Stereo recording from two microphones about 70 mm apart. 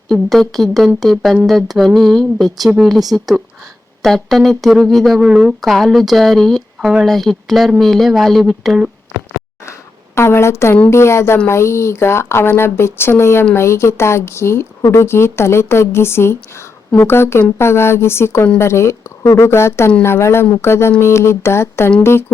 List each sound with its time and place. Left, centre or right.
0.1 s speech: centre
10.2 s speech: left
14.8 s speech: left
15.0 s speech: left